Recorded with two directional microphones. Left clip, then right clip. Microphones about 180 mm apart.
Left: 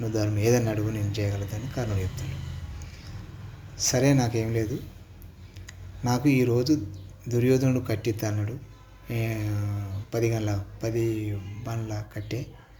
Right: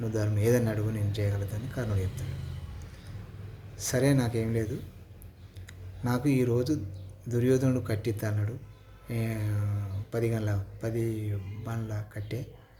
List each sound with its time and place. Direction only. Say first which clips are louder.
0.0 s speech: left 3 dB; 20° right (ahead or behind)
3.8 s speech: left 4 dB; 15° right (ahead or behind)
5.6 s speech: left 5 dB; 15° right (ahead or behind)